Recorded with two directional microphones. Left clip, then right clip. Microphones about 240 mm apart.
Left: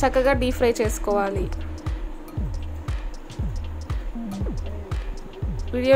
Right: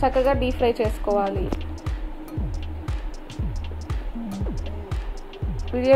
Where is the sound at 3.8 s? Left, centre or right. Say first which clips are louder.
Even; centre.